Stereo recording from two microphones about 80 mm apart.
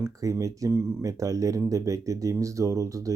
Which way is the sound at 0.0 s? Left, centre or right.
Right.